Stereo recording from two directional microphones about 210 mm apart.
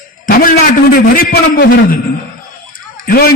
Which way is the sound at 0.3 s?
45° left (ahead or behind).